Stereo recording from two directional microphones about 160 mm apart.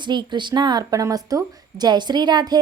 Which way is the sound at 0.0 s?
30° right (ahead or behind).